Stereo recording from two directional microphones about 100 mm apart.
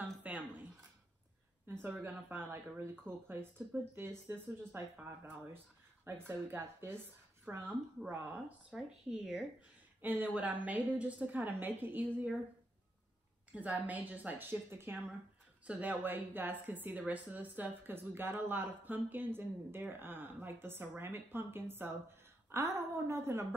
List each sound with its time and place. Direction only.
0.0 s a sound: 15° right (ahead or behind)
1.7 s speech: 20° right (ahead or behind)
8.7 s speech: 5° right (ahead or behind)
10.0 s a woman's voice: 20° right (ahead or behind)
13.5 s a woman's voice: 15° right (ahead or behind)